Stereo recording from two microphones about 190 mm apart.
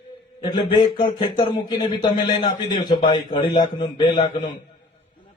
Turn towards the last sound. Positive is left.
turn(degrees=25)  # may be behind; listen again after turning